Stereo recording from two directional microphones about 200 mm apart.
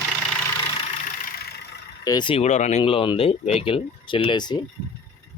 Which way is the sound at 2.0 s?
20° left (ahead or behind).